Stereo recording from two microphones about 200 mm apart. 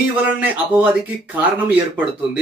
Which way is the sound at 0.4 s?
10° right (ahead or behind).